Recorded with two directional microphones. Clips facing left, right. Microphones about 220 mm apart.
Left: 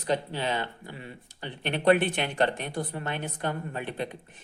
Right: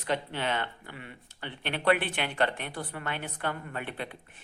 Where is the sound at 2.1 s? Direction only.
20° left (ahead or behind).